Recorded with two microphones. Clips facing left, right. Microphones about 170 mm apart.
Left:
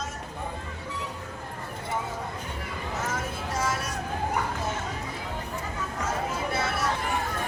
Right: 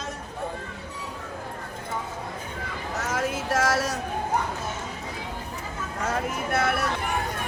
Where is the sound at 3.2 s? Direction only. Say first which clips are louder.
Right 6 dB; 85° right.